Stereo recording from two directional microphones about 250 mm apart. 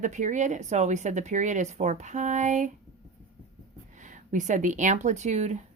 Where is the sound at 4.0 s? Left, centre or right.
Right.